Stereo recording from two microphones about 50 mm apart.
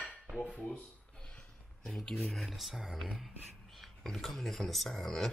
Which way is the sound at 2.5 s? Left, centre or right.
Centre.